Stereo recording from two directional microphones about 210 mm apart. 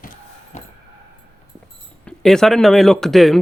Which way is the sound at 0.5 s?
30° left (ahead or behind).